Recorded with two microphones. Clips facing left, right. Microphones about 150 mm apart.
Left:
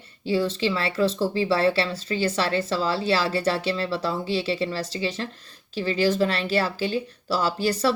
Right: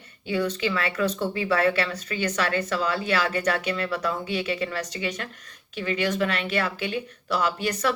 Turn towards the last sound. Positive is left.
turn(degrees=30)  # may be behind; listen again after turning